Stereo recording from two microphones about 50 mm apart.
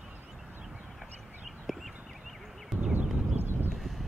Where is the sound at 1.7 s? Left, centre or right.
Centre.